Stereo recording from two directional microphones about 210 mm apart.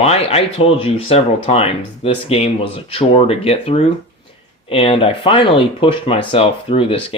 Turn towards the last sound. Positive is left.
turn(degrees=25)  # may be behind; listen again after turning